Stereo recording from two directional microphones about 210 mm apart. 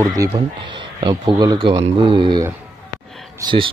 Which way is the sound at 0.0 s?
15° right (ahead or behind).